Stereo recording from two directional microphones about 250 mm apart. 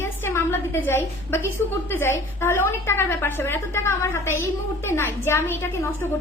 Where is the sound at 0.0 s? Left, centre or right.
Centre.